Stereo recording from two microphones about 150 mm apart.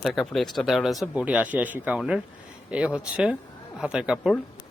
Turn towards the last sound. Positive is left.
turn(degrees=-5)  # may be behind; listen again after turning